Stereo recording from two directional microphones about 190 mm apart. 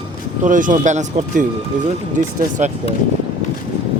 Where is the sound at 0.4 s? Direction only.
45° right (ahead or behind).